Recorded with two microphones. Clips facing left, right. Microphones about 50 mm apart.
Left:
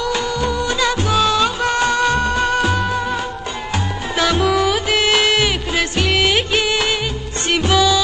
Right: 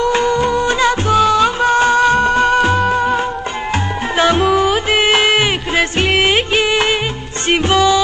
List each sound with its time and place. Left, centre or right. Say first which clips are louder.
0.0 s music: right 6 dB; right
1.3 s music of bollywood: right 5 dB; right
4.2 s music: right 3 dB; right
6.3 s music of bollywood: right 3 dB; right
7.4 s music: right 3 dB; right